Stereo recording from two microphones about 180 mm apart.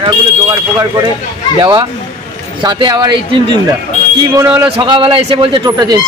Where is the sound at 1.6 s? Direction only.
25° right (ahead or behind).